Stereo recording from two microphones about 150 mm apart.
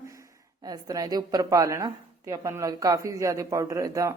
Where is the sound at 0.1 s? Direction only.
25° right (ahead or behind).